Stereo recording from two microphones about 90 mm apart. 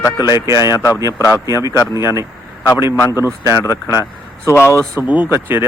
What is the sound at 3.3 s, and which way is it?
Speech, 30° right (ahead or behind).